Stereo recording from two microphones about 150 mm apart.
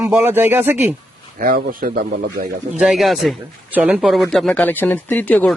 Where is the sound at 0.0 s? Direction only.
10° right (ahead or behind).